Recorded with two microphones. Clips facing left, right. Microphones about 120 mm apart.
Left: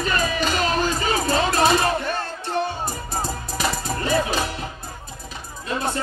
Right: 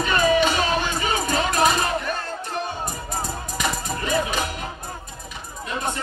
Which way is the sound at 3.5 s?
30° left (ahead or behind).